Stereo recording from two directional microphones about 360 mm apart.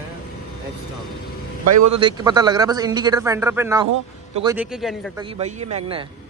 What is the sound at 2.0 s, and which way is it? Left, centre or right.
A man's voice, centre.